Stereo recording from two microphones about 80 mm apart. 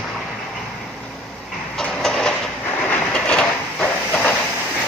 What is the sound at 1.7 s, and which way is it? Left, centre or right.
Printer, centre.